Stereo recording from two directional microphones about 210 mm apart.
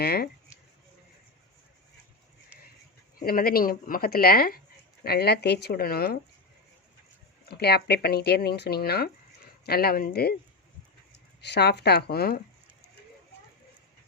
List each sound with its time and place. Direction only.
0.0 s speech: 50° left (ahead or behind)
3.2 s speech: 45° left (ahead or behind)
7.4 s speech: 50° left (ahead or behind)
11.3 s speech: 55° left (ahead or behind)